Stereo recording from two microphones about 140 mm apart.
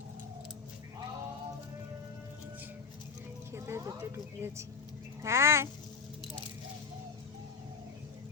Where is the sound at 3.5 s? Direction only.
20° right (ahead or behind).